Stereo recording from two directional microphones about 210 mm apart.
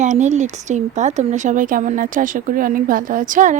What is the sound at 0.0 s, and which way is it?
Speech, 35° right (ahead or behind).